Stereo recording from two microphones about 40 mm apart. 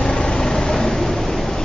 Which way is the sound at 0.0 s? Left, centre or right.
Left.